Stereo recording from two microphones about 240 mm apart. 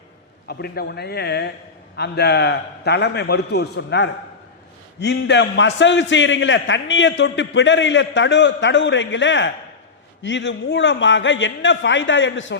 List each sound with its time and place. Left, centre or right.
0.4 s a man's voice: left